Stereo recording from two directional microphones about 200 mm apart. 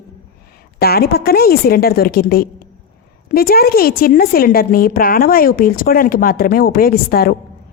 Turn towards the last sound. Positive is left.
turn(degrees=50)  # may be behind; listen again after turning